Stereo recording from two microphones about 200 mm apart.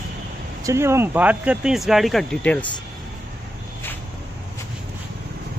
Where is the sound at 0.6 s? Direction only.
15° right (ahead or behind); by 2.7 s 5° left (ahead or behind).